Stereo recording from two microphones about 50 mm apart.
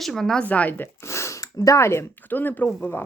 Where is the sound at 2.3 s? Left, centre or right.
Left.